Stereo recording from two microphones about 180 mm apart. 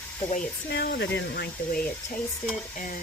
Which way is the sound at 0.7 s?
65° left (ahead or behind).